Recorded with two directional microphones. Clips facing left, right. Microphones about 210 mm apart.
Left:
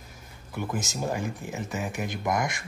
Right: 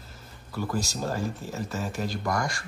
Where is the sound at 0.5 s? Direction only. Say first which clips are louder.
Right 1 dB; 20° left (ahead or behind).